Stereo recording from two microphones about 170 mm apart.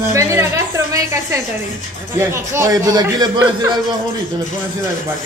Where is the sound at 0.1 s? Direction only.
15° right (ahead or behind).